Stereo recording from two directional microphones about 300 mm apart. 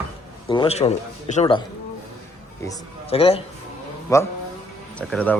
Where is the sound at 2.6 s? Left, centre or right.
Centre.